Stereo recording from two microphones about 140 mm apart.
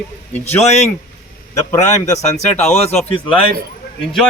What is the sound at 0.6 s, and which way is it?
Speech, 55° left (ahead or behind).